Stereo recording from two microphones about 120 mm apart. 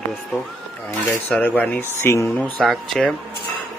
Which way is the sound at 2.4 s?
10° left (ahead or behind).